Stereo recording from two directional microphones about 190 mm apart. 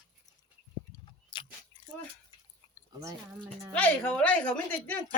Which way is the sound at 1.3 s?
25° left (ahead or behind).